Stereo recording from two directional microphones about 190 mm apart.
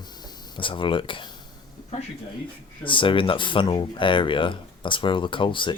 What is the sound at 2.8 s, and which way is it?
Speech, 25° left (ahead or behind).